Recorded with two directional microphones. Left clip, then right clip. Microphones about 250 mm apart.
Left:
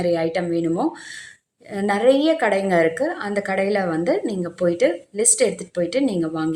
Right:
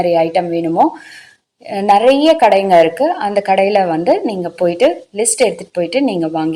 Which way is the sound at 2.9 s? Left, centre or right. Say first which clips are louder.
Right 9 dB; centre.